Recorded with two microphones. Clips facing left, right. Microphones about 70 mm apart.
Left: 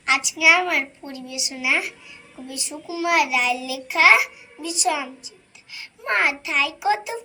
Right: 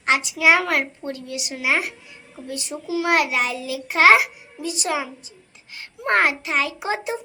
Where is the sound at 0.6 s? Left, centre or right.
Right.